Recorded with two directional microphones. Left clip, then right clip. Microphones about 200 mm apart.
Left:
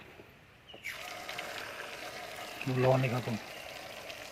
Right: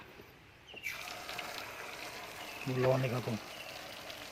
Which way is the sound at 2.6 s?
15° left (ahead or behind).